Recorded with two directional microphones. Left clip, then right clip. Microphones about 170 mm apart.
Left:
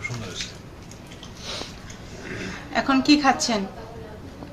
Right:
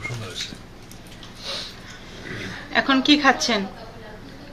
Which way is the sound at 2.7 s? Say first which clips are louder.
Right 2 dB; 5° left (ahead or behind).